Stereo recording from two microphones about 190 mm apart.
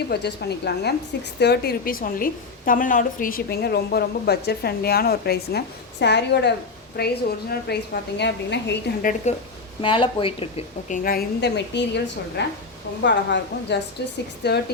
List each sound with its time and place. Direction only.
0.1 s a woman's voice: 60° left (ahead or behind)
9.3 s a woman's voice: 35° left (ahead or behind)
9.8 s speech: 25° left (ahead or behind)
10.8 s a woman's voice: 45° left (ahead or behind); by 14.6 s 65° left (ahead or behind)